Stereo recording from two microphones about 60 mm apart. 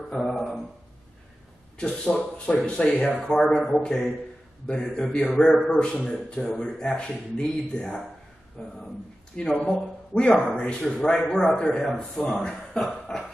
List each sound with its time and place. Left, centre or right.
0.1 s speech: centre
1.8 s a man's voice: centre